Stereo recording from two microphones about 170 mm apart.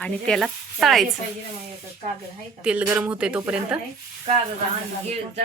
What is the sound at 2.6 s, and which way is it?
A woman's voice, 10° right (ahead or behind).